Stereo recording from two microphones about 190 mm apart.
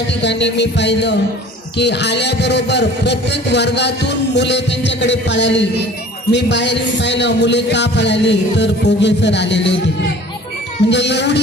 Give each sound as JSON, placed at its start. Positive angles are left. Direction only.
{"t": 0.2, "sound": "speech", "side_deg": 65}
{"t": 10.8, "sound": "speech", "side_deg": 65}